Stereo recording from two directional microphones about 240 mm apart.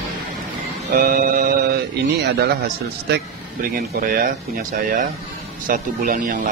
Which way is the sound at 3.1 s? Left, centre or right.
Right.